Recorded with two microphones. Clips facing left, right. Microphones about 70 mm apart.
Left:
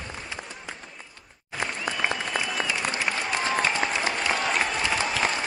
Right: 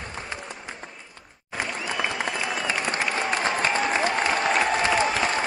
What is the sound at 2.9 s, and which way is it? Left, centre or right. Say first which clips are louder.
Applause: right 2 dB; right.